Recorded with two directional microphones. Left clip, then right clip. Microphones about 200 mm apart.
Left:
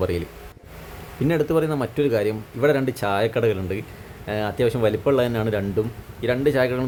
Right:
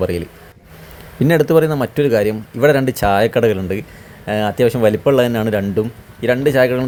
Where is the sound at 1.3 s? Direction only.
25° right (ahead or behind).